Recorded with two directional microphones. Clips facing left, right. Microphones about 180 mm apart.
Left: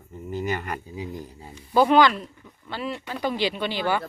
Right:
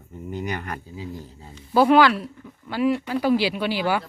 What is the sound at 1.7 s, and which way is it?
Speech, 5° right (ahead or behind).